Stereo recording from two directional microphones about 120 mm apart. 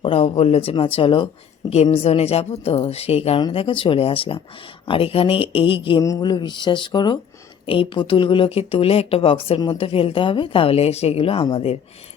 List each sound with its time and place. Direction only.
0.0 s speech: 50° left (ahead or behind)
1.7 s a woman's voice: 60° left (ahead or behind)
3.5 s speech: 50° left (ahead or behind)
6.0 s speech: 30° left (ahead or behind); by 11.8 s 55° left (ahead or behind)